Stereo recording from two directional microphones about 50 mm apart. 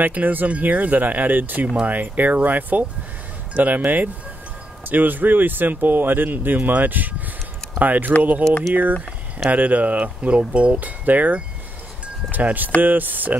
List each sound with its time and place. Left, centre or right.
0.0 s speech: right
9.5 s speech: right
11.1 s speech: right